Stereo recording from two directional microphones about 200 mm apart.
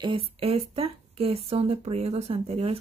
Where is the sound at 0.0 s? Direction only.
25° right (ahead or behind).